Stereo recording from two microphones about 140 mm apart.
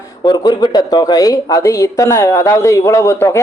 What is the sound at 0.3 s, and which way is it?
Speech, 30° left (ahead or behind).